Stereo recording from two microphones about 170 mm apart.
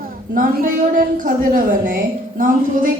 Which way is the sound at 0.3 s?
55° right (ahead or behind).